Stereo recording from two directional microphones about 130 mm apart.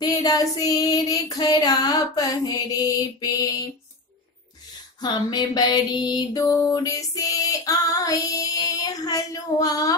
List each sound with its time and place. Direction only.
0.0 s music: 30° left (ahead or behind)
5.0 s music: 35° left (ahead or behind)